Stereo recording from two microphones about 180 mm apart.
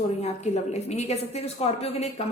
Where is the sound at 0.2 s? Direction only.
35° left (ahead or behind).